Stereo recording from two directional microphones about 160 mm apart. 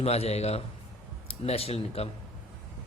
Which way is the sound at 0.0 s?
40° left (ahead or behind).